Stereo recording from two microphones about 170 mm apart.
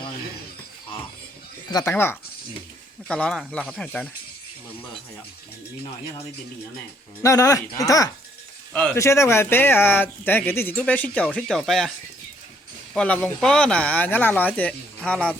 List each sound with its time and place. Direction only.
1.7 s speech: 15° left (ahead or behind)
7.2 s speech: 20° left (ahead or behind); by 11.9 s centre (ahead or behind)
12.9 s speech: 5° left (ahead or behind)